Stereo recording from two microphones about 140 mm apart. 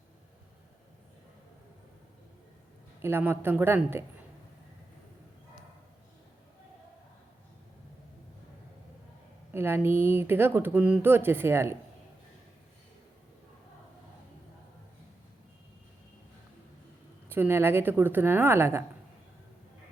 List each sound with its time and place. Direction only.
3.0 s speech: 15° right (ahead or behind)
9.5 s speech: 15° right (ahead or behind)
17.2 s speech: 15° right (ahead or behind)